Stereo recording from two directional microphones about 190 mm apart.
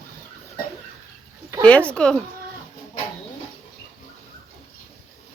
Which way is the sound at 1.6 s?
5° left (ahead or behind).